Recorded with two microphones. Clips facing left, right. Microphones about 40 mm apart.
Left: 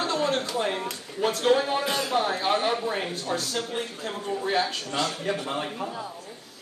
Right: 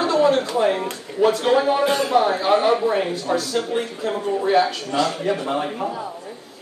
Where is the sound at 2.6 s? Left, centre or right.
Right.